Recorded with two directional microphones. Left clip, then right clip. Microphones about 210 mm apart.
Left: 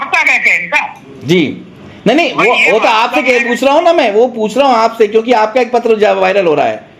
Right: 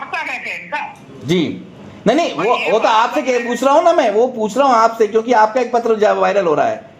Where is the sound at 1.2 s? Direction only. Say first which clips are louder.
Left 6 dB; 20° left (ahead or behind).